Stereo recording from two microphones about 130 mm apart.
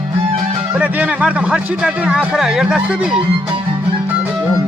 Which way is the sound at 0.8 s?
10° right (ahead or behind).